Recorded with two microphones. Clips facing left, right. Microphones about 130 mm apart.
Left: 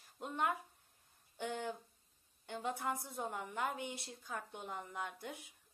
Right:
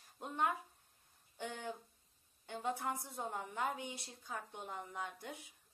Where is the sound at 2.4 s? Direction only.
35° right (ahead or behind).